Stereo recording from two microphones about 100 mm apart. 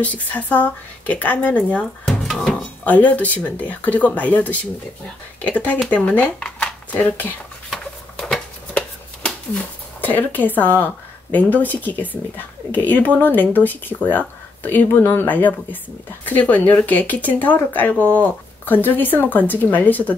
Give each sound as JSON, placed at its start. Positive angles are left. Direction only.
{"t": 0.0, "sound": "speech", "side_deg": 15}
{"t": 2.8, "sound": "speech", "side_deg": 15}
{"t": 7.7, "sound": "a sound", "side_deg": 0}
{"t": 10.0, "sound": "speech", "side_deg": 20}